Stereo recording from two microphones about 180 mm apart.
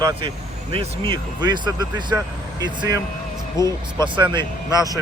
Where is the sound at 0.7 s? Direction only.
30° right (ahead or behind).